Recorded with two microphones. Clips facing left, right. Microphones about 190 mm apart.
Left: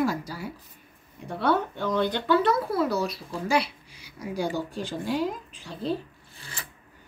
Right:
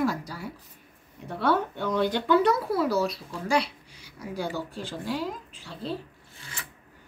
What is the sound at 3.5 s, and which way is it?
Speech, 10° left (ahead or behind).